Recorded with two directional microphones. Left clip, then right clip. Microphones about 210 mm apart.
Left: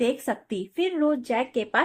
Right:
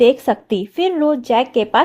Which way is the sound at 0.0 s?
35° right (ahead or behind).